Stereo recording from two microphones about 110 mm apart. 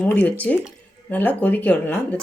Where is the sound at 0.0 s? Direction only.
15° left (ahead or behind).